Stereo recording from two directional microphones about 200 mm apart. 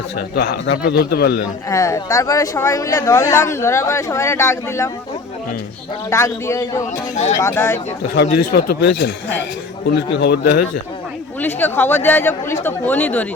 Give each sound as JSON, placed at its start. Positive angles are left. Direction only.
{"t": 0.3, "sound": "a man's voice", "side_deg": 60}
{"t": 1.7, "sound": "speech", "side_deg": 15}
{"t": 6.1, "sound": "speech", "side_deg": 15}
{"t": 8.1, "sound": "a man's voice", "side_deg": 60}
{"t": 10.2, "sound": "a man's voice", "side_deg": 55}
{"t": 11.3, "sound": "speech", "side_deg": 10}